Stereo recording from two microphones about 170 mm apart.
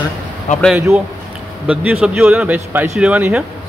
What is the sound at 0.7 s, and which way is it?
A man's voice, 10° right (ahead or behind).